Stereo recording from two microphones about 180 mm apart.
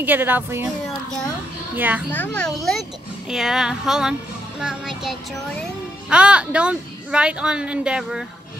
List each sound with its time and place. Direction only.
0.0 s a woman's voice: 10° right (ahead or behind)
1.8 s a woman's voice: 10° right (ahead or behind)
2.0 s speech: 10° left (ahead or behind)